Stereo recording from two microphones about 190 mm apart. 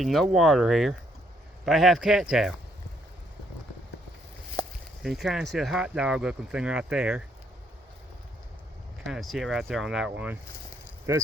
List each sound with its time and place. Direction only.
0.0 s speech: centre (ahead or behind)
5.0 s speech: centre (ahead or behind)
9.0 s speech: centre (ahead or behind)
11.1 s speech: 15° right (ahead or behind)